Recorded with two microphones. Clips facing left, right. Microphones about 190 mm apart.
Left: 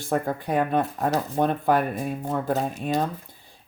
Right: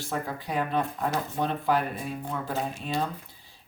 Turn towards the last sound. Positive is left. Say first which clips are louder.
# left 5 dB
turn(degrees=45)  # may be behind; listen again after turning